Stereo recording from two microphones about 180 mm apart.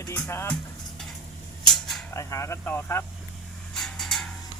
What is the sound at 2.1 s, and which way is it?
Speech, 15° left (ahead or behind).